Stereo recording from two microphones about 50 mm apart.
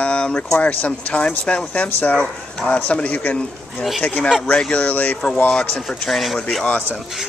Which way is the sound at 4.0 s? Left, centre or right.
Left.